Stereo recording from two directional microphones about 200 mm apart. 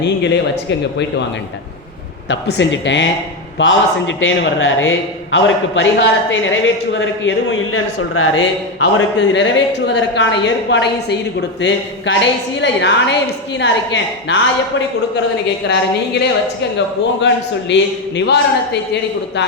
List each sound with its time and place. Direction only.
2.3 s a woman's voice: 65° left (ahead or behind)
15.6 s a woman's voice: 60° left (ahead or behind)